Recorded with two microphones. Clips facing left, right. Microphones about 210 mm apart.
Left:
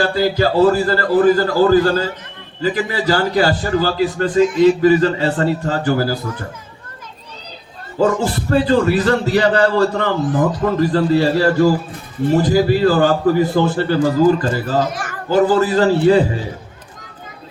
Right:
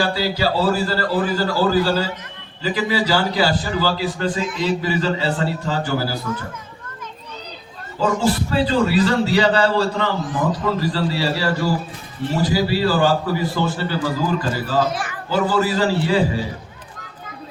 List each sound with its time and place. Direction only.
0.0 s a man's voice: 50° left (ahead or behind)
7.9 s a man's voice: 55° left (ahead or behind)